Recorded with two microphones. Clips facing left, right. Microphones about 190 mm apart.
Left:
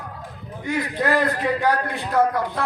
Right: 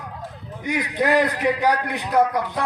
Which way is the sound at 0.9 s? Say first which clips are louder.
Right 3 dB; 20° right (ahead or behind).